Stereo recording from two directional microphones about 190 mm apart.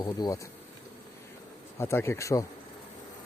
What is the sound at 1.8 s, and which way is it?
Speech, 10° left (ahead or behind).